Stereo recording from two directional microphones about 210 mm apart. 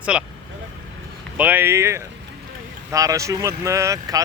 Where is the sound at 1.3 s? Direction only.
10° right (ahead or behind).